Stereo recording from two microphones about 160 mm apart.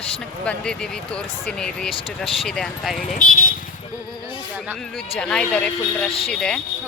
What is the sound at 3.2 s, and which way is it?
Speech, 60° left (ahead or behind).